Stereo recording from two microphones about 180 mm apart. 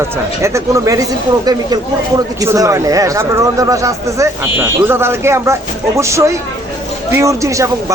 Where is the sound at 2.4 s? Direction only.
15° right (ahead or behind).